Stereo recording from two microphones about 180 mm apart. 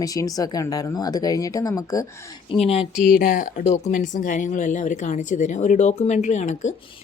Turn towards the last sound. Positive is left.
turn(degrees=40)  # may be behind; listen again after turning